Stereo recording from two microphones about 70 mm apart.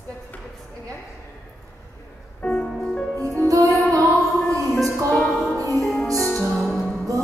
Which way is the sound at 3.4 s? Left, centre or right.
Right.